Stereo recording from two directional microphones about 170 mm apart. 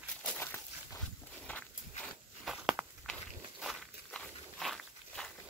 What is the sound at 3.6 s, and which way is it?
Walk, centre (ahead or behind).